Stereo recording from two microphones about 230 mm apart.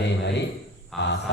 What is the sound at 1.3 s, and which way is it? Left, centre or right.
Speech, left.